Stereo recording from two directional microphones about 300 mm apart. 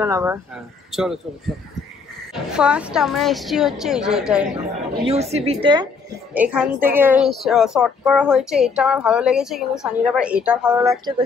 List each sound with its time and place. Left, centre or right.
0.0 s a woman's voice: centre
2.3 s a woman's voice: centre
5.0 s a woman's voice: right
6.3 s a woman's voice: centre